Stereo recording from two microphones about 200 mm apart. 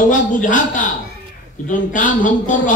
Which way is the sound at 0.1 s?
40° left (ahead or behind).